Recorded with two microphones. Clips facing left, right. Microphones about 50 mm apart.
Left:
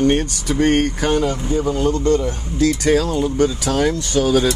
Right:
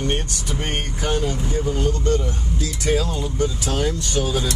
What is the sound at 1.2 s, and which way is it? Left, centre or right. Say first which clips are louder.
Speech: left 5 dB; left.